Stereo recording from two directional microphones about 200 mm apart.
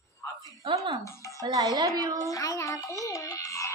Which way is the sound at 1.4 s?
20° right (ahead or behind).